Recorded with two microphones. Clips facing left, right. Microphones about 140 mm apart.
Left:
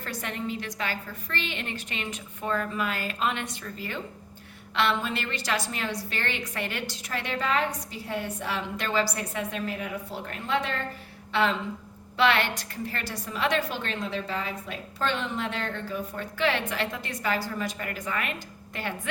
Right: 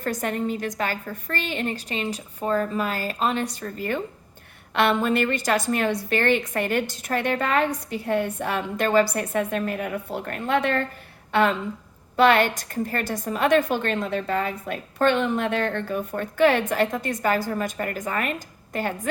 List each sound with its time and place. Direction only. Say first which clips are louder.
0.0 s a woman's voice: right 7 dB; 45° right (ahead or behind)
11.3 s a sound: right 5 dB; 50° right (ahead or behind)
12.1 s a woman's voice: right 6 dB; 45° right (ahead or behind)